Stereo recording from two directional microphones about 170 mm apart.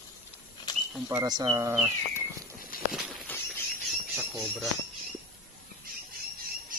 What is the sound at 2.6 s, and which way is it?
Walk, 55° left (ahead or behind).